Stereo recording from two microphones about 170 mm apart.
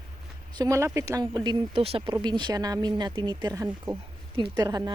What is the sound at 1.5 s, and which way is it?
A woman's voice, 35° right (ahead or behind).